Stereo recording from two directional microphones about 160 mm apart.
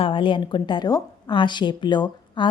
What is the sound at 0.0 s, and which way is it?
A woman's voice, 30° left (ahead or behind).